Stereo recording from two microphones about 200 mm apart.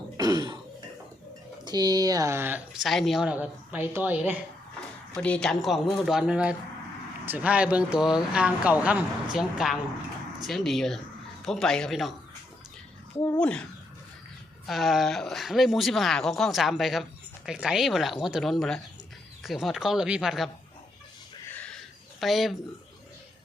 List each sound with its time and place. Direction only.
0.2 s throat clearing: 20° right (ahead or behind)
1.6 s speech: 20° right (ahead or behind)
5.1 s speech: 5° left (ahead or behind)
13.1 s speech: 10° left (ahead or behind)
14.7 s speech: centre (ahead or behind)
21.5 s a sound: 5° left (ahead or behind)
22.2 s speech: centre (ahead or behind)